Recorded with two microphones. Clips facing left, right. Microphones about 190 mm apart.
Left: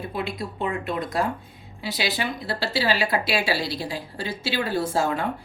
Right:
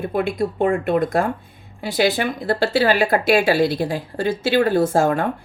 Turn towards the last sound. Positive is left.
turn(degrees=-50)  # may be behind; listen again after turning